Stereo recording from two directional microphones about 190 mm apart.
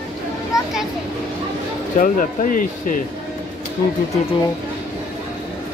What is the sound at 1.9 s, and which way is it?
Speech, 45° left (ahead or behind).